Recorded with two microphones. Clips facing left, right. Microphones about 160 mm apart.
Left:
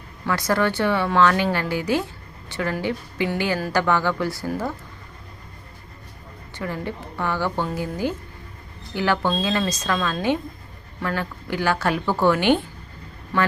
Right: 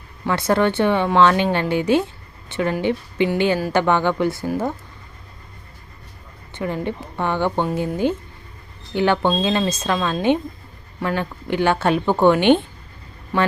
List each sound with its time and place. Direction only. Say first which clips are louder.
0.3 s speech: right 3 dB; 25° right (ahead or behind)
6.6 s speech: right 4 dB; 20° right (ahead or behind)